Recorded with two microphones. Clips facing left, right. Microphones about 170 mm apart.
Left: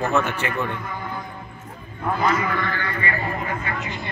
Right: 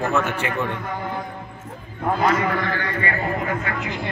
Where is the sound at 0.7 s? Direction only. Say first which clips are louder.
Right 3 dB; 65° right (ahead or behind).